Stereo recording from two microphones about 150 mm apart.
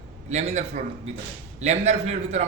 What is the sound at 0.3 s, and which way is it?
A man's voice, 50° right (ahead or behind).